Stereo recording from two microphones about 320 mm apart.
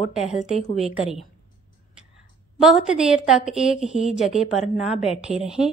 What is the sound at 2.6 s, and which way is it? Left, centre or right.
A woman's voice, centre.